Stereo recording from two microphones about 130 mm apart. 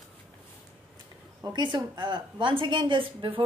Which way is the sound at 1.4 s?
35° right (ahead or behind).